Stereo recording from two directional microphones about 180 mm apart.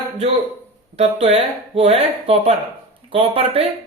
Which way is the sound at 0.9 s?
35° right (ahead or behind).